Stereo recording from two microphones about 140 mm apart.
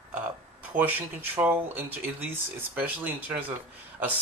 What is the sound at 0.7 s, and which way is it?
Speech, 15° right (ahead or behind).